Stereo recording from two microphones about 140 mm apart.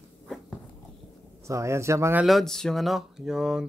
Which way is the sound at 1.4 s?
20° right (ahead or behind).